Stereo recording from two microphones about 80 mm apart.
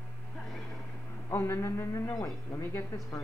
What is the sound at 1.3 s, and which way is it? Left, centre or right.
A man's voice, left.